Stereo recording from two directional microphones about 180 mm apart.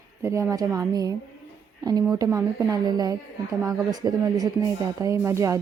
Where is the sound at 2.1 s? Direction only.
20° right (ahead or behind).